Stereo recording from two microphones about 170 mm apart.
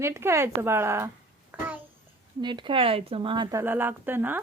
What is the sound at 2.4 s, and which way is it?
Speech, 25° right (ahead or behind).